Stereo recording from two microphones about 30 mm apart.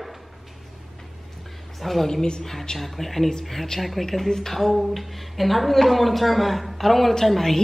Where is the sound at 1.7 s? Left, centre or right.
Centre.